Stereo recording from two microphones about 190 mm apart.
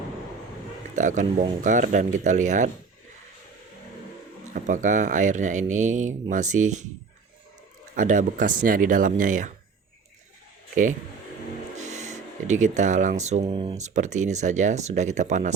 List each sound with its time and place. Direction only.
0.9 s speech: 40° right (ahead or behind)
4.5 s speech: 40° right (ahead or behind)
7.9 s speech: 45° right (ahead or behind)
11.9 s speech: 40° right (ahead or behind)